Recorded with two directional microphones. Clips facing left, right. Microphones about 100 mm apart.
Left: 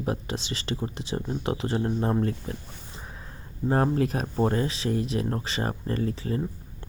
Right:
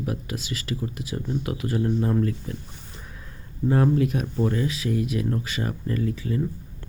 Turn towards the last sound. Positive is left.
turn(degrees=35)  # may be behind; listen again after turning